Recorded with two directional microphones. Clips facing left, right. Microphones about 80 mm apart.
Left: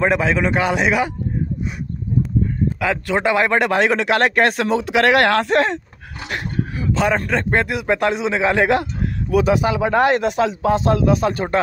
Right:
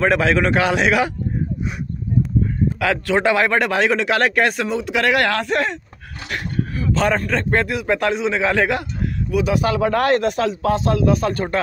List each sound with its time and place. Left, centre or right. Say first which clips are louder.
0.0 s a man's voice: right 1 dB; centre
3.1 s a man's voice: even; centre
6.3 s a sound: even; left
7.2 s a man's voice: left 1 dB; centre
9.6 s a man's voice: left 1 dB; centre